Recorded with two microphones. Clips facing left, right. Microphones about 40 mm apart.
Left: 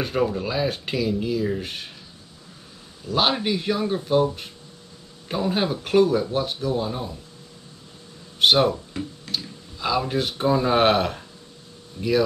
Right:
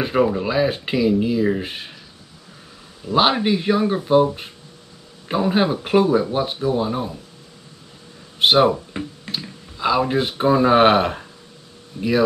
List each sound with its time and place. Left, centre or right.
0.0 s speech: right
3.2 s speech: centre
8.4 s speech: centre
8.7 s guitar: right
9.3 s speech: centre